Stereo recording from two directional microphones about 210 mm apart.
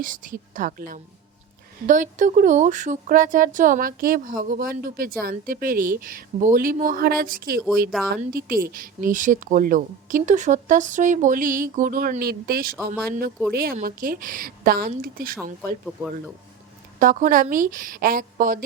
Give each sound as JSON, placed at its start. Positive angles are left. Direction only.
{"t": 0.0, "sound": "a woman's voice", "side_deg": -40}
{"t": 16.0, "sound": "speech", "side_deg": -10}
{"t": 17.0, "sound": "speech", "side_deg": -40}